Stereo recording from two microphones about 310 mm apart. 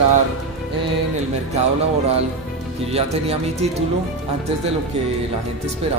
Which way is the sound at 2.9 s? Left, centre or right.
Centre.